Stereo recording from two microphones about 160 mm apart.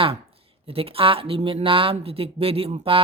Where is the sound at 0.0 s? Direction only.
35° right (ahead or behind).